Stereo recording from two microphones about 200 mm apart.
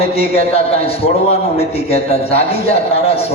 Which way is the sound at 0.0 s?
30° left (ahead or behind).